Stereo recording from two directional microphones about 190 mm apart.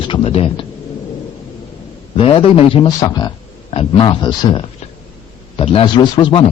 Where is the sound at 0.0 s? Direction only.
30° left (ahead or behind).